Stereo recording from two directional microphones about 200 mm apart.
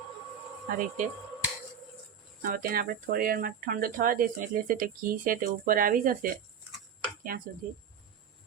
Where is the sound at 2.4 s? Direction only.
45° right (ahead or behind).